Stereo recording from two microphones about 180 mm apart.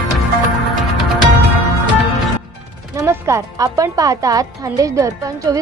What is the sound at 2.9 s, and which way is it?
A woman's voice, 15° right (ahead or behind).